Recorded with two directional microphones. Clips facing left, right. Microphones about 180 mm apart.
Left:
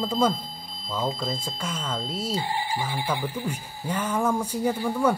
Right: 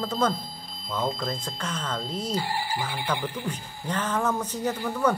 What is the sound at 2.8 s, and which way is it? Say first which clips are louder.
Speech: left 1 dB; 10° left (ahead or behind).